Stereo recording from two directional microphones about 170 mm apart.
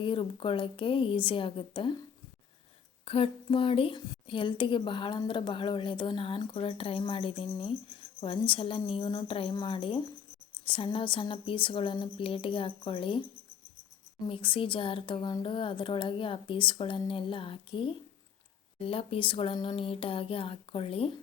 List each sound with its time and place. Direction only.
0.0 s a woman's voice: 30° left (ahead or behind)
3.0 s a woman's voice: 35° left (ahead or behind)
14.3 s a woman's voice: 30° left (ahead or behind)